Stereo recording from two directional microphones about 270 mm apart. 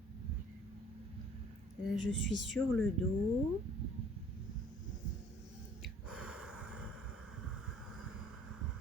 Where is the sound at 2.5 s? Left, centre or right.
Centre.